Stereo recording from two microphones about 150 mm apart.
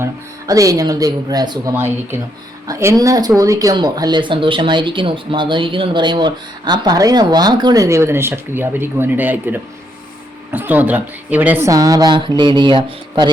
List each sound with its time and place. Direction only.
0.0 s speech: 20° right (ahead or behind)
1.7 s speech: 15° right (ahead or behind); by 13.3 s 30° right (ahead or behind)